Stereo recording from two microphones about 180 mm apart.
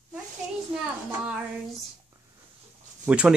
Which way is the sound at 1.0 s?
5° right (ahead or behind).